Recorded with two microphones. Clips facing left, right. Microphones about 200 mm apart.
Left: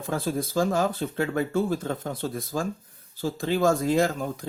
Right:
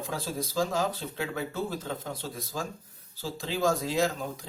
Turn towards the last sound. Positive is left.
turn(degrees=50)  # may be behind; listen again after turning